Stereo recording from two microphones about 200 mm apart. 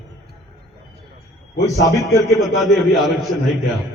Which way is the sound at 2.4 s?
Centre (ahead or behind).